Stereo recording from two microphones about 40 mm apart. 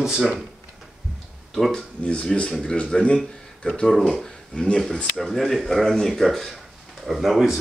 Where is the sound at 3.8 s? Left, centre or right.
Centre.